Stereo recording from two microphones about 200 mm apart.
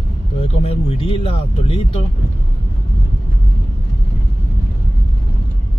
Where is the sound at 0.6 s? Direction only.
30° left (ahead or behind).